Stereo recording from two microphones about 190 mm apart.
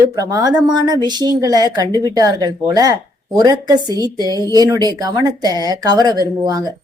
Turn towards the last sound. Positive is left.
turn(degrees=-20)  # may be behind; listen again after turning